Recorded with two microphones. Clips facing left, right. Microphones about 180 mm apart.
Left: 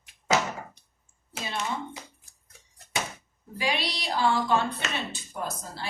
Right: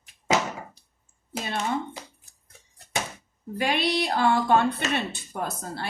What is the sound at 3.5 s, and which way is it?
A woman's voice, 55° right (ahead or behind).